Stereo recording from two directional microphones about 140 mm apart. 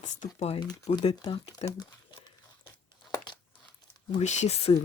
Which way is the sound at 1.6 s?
45° left (ahead or behind).